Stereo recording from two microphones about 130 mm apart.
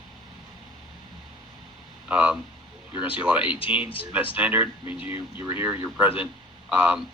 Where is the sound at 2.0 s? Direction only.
10° right (ahead or behind).